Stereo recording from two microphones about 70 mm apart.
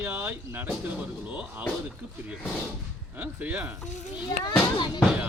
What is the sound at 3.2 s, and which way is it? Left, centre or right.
Speech, right.